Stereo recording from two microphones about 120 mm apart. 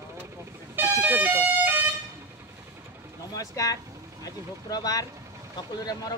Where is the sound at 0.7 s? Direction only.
15° right (ahead or behind).